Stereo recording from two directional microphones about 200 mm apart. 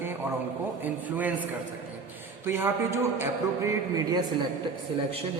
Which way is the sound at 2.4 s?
10° right (ahead or behind).